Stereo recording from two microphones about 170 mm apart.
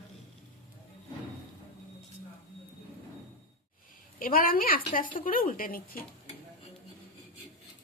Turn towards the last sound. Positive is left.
turn(degrees=55)  # may be behind; listen again after turning